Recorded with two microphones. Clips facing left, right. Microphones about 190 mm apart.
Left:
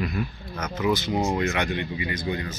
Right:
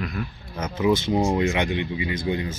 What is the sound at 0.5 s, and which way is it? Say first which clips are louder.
Speech: right 3 dB; 30° right (ahead or behind).